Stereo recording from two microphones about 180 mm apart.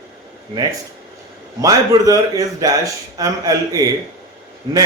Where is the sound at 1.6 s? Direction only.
20° right (ahead or behind).